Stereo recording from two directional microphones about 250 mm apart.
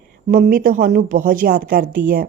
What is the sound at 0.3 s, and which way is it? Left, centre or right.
A woman's voice, right.